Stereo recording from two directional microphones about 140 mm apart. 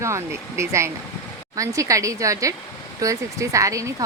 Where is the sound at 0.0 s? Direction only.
20° right (ahead or behind).